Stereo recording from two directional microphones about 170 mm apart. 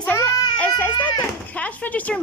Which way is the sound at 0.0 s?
10° left (ahead or behind).